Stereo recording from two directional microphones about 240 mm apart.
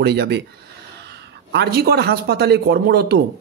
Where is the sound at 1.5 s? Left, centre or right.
Right.